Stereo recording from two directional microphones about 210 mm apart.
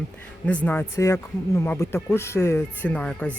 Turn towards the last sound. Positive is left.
turn(degrees=5)  # may be behind; listen again after turning